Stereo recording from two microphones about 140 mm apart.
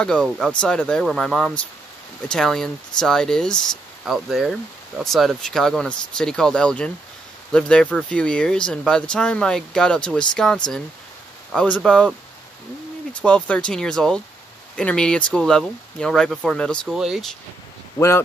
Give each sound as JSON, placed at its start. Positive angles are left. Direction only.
{"t": 0.0, "sound": "speech", "side_deg": 5}
{"t": 13.1, "sound": "speech", "side_deg": 10}
{"t": 17.9, "sound": "speech", "side_deg": 20}